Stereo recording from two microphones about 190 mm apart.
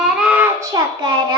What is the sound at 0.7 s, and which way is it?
Speech, 20° right (ahead or behind).